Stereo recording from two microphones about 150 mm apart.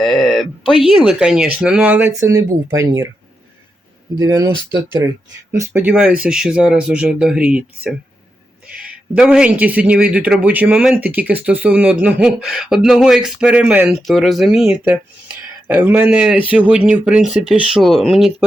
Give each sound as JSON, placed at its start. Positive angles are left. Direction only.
{"t": 0.0, "sound": "a sound", "side_deg": 0}
{"t": 0.7, "sound": "speech", "side_deg": 0}
{"t": 4.2, "sound": "speech", "side_deg": -25}
{"t": 14.1, "sound": "speech", "side_deg": 0}